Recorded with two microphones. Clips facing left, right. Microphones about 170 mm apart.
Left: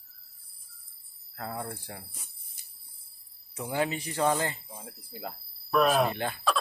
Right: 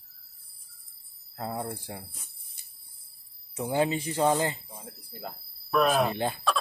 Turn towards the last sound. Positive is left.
turn(degrees=0)  # may be behind; listen again after turning